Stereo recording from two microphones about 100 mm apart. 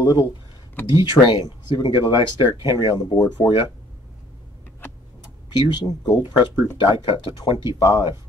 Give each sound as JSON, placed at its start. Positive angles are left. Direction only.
{"t": 0.0, "sound": "speech", "side_deg": 40}
{"t": 5.2, "sound": "speech", "side_deg": 45}
{"t": 6.8, "sound": "speech", "side_deg": 55}
{"t": 7.8, "sound": "speech", "side_deg": 45}